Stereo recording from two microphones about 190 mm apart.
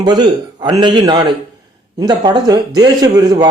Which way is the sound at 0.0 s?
25° right (ahead or behind).